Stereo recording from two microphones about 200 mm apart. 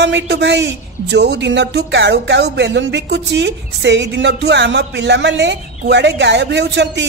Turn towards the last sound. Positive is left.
turn(degrees=-60)  # may be behind; listen again after turning